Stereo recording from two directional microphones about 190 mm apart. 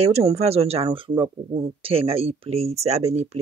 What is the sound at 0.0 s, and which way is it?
Speech, 35° right (ahead or behind).